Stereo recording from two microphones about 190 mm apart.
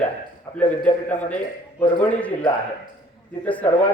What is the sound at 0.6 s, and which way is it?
Speech, 10° left (ahead or behind).